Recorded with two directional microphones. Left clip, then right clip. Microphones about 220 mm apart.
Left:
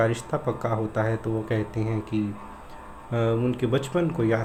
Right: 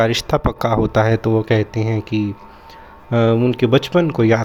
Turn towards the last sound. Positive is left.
turn(degrees=-35)  # may be behind; listen again after turning